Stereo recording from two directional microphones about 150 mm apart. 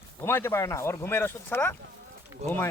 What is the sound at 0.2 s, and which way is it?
Speech, 15° left (ahead or behind).